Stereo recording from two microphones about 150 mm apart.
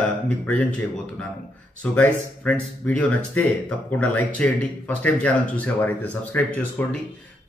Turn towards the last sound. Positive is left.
turn(degrees=10)  # may be behind; listen again after turning